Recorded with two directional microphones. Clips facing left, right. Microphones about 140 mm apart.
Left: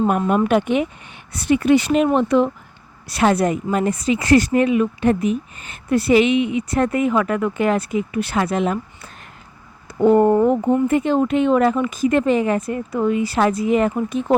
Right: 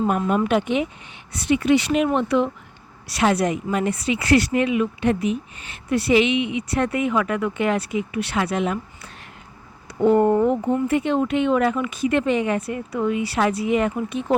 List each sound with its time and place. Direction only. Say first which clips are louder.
0.0 s a woman's voice: left 3 dB; 45° left (ahead or behind)
10.0 s speech: left 3 dB; 40° left (ahead or behind)